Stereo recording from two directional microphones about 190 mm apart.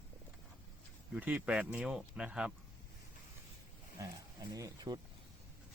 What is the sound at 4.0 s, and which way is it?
Speech, 15° right (ahead or behind).